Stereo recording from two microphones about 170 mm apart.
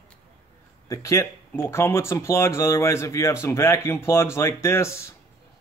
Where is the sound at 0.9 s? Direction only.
20° left (ahead or behind).